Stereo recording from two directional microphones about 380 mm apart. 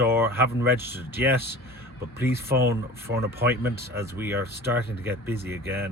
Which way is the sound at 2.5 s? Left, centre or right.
Centre.